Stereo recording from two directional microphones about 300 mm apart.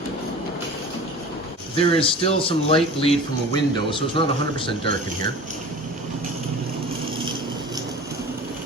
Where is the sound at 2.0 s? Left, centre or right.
Centre.